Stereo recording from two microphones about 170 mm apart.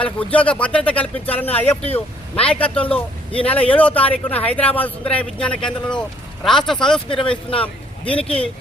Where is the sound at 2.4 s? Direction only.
10° left (ahead or behind).